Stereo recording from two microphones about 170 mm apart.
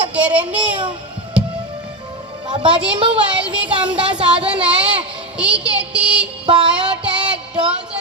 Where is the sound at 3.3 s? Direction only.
5° right (ahead or behind).